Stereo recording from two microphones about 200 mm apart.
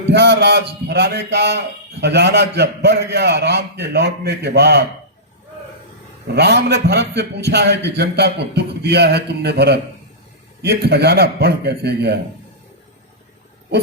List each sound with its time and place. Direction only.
0.1 s a man's voice: 55° right (ahead or behind)
6.3 s a man's voice: 55° right (ahead or behind)